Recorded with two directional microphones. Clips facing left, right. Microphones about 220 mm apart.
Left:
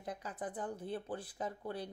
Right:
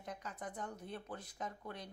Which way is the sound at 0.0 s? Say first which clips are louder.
Left 4 dB; 30° left (ahead or behind).